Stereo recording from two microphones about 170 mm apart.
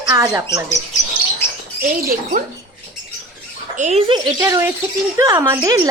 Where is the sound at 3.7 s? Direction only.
45° right (ahead or behind).